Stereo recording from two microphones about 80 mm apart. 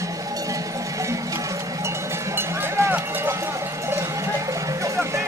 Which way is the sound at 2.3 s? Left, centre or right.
Right.